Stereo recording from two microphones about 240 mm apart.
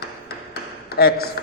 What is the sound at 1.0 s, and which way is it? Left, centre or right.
Speech, left.